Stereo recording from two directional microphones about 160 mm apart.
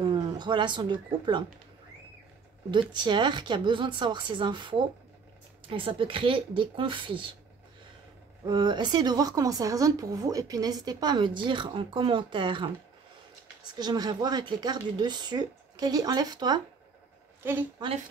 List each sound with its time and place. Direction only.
0.0 s speech: 30° right (ahead or behind)
2.7 s a woman's voice: 30° right (ahead or behind)
8.5 s a woman's voice: 30° right (ahead or behind)
13.7 s a woman's voice: 25° right (ahead or behind)
17.4 s a woman's voice: 15° right (ahead or behind)